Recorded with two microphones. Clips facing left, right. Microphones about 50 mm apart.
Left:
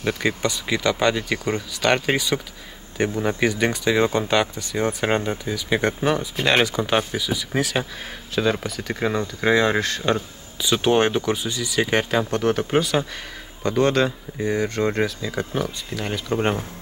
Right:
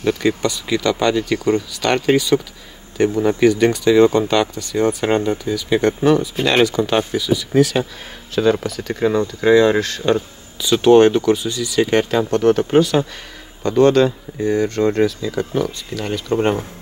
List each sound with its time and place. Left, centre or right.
0.0 s speech: centre
8.4 s speech: centre
8.6 s speech: centre